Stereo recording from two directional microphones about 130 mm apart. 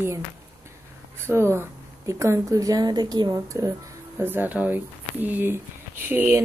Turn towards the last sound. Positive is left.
turn(degrees=-15)  # may be behind; listen again after turning